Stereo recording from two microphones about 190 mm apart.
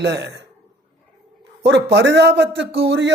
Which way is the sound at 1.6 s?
65° right (ahead or behind).